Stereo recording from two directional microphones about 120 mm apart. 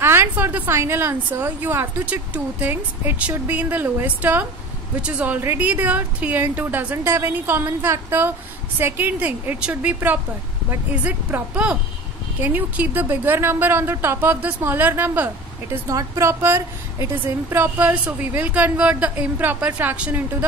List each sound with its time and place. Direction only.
0.0 s a woman's voice: 20° right (ahead or behind)
15.9 s a woman's voice: 25° right (ahead or behind)